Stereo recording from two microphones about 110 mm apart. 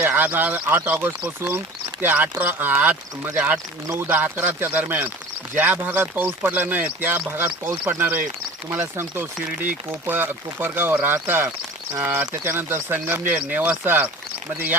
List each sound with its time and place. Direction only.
0.0 s speech: 20° right (ahead or behind)